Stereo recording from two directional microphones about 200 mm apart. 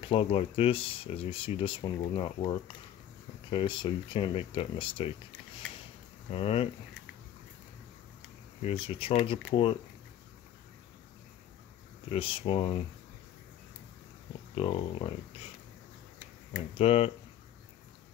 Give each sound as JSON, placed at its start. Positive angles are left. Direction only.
{"t": 0.0, "sound": "speech", "side_deg": 25}
{"t": 6.3, "sound": "speech", "side_deg": 30}
{"t": 8.6, "sound": "speech", "side_deg": 30}
{"t": 12.1, "sound": "speech", "side_deg": 25}
{"t": 14.5, "sound": "speech", "side_deg": 30}
{"t": 16.7, "sound": "speech", "side_deg": 30}